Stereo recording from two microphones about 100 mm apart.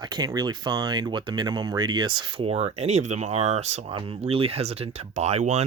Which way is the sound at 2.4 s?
90° right.